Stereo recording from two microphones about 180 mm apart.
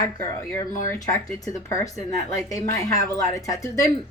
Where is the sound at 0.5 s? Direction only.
20° left (ahead or behind).